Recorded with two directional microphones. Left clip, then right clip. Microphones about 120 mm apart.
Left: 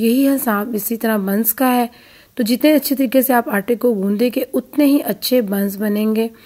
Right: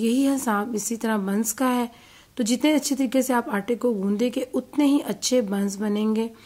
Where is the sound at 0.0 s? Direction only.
35° left (ahead or behind).